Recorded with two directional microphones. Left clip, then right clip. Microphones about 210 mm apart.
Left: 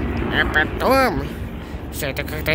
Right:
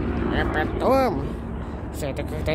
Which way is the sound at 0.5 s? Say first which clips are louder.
Left 3 dB; centre (ahead or behind).